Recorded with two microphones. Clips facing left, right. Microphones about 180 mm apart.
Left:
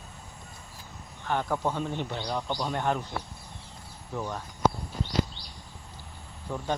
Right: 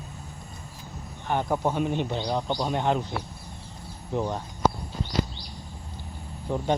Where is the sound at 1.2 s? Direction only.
15° right (ahead or behind).